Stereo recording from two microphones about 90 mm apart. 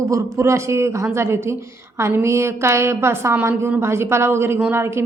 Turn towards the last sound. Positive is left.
turn(degrees=-30)  # may be behind; listen again after turning